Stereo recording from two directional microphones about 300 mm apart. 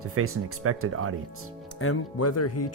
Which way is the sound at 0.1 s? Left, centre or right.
Right.